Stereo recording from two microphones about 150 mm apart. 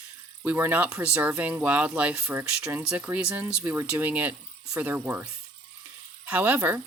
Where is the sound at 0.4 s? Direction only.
15° right (ahead or behind).